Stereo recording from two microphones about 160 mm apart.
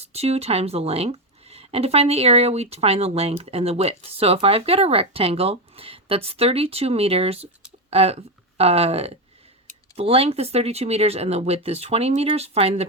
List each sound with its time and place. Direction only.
0.0 s speech: 40° right (ahead or behind)